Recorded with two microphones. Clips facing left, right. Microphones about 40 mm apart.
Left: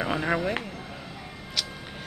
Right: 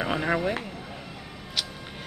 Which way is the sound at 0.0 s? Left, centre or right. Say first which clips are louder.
Right 1 dB; centre.